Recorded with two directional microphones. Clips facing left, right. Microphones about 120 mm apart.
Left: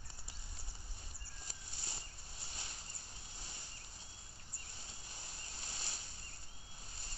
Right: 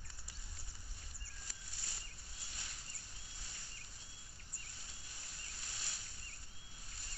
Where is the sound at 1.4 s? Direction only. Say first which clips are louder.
Left 4 dB; 25° left (ahead or behind).